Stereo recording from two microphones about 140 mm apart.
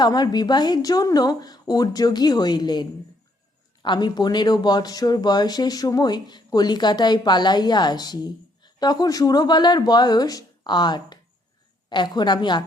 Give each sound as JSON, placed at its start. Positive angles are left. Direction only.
{"t": 0.0, "sound": "speech", "side_deg": 30}
{"t": 3.8, "sound": "a woman's voice", "side_deg": 30}